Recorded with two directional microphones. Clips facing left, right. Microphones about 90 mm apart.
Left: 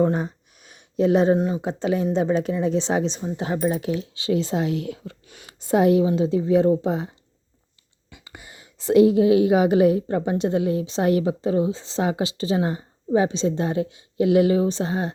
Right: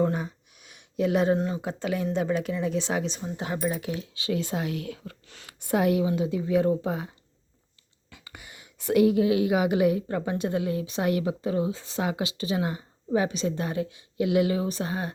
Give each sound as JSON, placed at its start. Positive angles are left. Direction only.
{"t": 0.0, "sound": "a sound", "side_deg": 35}
{"t": 1.4, "sound": "speech", "side_deg": 20}
{"t": 8.2, "sound": "speech", "side_deg": 25}